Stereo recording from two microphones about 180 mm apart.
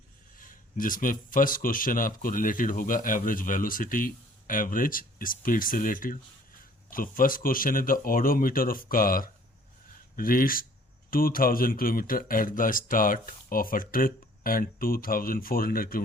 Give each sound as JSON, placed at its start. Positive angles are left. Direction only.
{"t": 0.3, "sound": "speech", "side_deg": 50}